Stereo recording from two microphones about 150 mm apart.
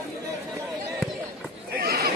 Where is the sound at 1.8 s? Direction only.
90° right.